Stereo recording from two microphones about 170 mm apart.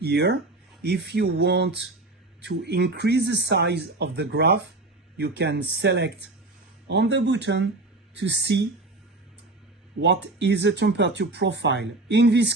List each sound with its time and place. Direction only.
0.0 s speech: 75° right (ahead or behind)
6.8 s speech: 90° right
10.0 s speech: 90° right